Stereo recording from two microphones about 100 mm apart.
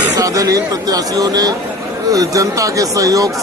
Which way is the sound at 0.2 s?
35° right (ahead or behind).